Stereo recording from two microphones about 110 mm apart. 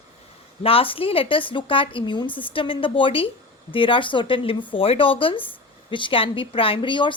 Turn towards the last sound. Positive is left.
turn(degrees=50)  # may be behind; listen again after turning